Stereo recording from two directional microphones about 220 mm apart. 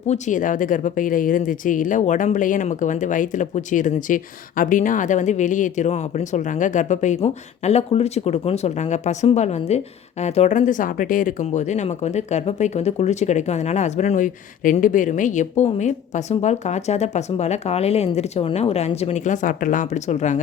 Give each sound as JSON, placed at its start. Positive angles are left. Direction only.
{"t": 0.1, "sound": "speech", "side_deg": 35}